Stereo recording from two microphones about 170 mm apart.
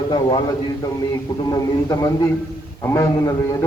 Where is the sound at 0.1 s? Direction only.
25° left (ahead or behind).